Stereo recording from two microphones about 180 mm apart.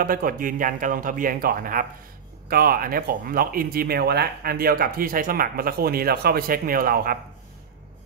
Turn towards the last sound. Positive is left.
turn(degrees=-55)  # may be behind; listen again after turning